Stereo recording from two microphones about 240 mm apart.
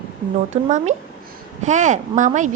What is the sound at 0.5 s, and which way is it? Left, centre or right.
A woman's voice, right.